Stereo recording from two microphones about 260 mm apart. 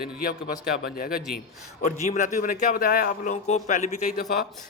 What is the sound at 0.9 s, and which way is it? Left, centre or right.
A man's voice, left.